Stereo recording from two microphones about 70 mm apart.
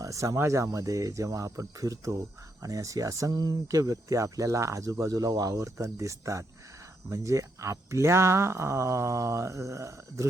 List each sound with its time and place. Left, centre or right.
0.0 s speech: right